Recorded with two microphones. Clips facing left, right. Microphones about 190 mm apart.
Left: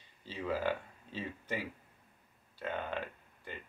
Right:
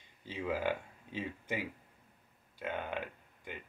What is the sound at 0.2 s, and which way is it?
Speech, 15° right (ahead or behind).